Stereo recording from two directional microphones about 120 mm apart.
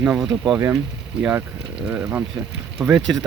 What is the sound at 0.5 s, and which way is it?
Speech, 25° right (ahead or behind).